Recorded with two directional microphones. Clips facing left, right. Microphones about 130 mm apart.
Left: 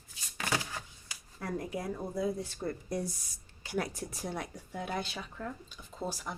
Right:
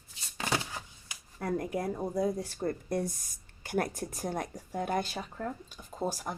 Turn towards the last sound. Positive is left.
turn(degrees=-45)  # may be behind; listen again after turning